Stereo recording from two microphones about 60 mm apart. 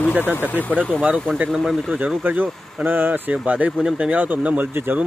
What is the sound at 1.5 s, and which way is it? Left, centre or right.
Speech, centre.